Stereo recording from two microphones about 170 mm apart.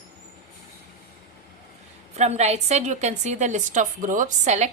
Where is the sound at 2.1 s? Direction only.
40° right (ahead or behind).